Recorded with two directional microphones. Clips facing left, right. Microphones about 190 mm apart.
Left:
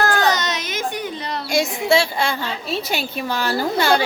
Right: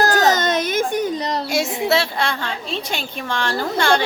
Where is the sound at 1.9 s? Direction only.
Centre (ahead or behind).